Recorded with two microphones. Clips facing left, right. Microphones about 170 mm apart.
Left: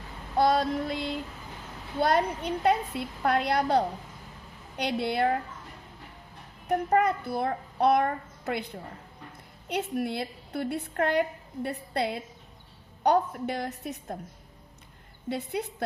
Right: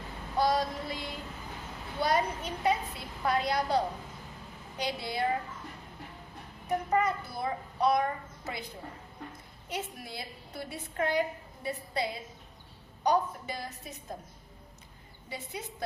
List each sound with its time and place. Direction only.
0.3 s female singing: 60° left (ahead or behind)
2.0 s a woman's voice: 60° left (ahead or behind)
6.7 s a woman's voice: 60° left (ahead or behind)
9.6 s a woman's voice: 65° left (ahead or behind)